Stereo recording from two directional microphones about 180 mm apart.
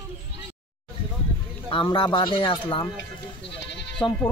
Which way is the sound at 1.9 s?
25° left (ahead or behind).